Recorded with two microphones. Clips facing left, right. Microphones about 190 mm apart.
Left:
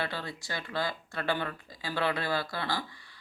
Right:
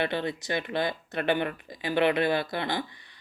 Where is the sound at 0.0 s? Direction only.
20° right (ahead or behind).